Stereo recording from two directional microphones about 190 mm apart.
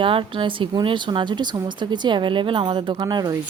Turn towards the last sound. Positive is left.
turn(degrees=-20)  # may be behind; listen again after turning